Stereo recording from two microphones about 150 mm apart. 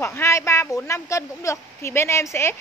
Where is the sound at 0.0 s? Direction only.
20° left (ahead or behind).